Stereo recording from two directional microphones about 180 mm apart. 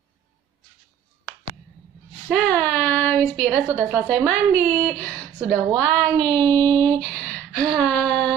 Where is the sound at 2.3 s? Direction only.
10° left (ahead or behind).